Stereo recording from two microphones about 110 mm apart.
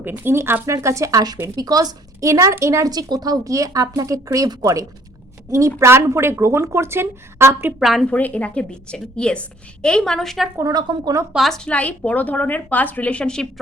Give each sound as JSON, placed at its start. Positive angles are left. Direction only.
{"t": 0.0, "sound": "a woman's voice", "side_deg": -20}
{"t": 7.8, "sound": "a woman's voice", "side_deg": 0}
{"t": 8.0, "sound": "a woman's voice", "side_deg": 10}
{"t": 10.6, "sound": "speech", "side_deg": -40}
{"t": 11.3, "sound": "a woman's voice", "side_deg": 5}